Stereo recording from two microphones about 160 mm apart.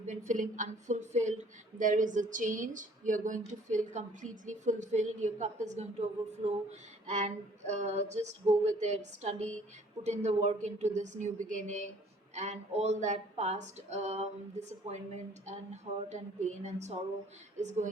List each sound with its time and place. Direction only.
0.0 s a woman's voice: 50° right (ahead or behind)